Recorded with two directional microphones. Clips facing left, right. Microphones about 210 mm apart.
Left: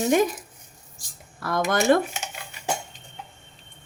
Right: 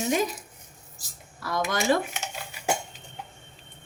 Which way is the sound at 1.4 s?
55° left (ahead or behind).